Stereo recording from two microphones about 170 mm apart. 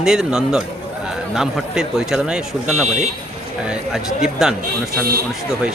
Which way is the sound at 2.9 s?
45° right (ahead or behind).